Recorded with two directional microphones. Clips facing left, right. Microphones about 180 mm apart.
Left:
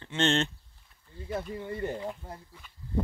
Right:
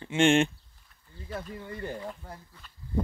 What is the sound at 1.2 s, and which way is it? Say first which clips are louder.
Speech: left 4 dB; 20° left (ahead or behind).